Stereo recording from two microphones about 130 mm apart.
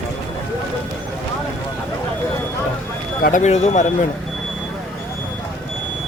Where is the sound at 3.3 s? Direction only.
60° left (ahead or behind).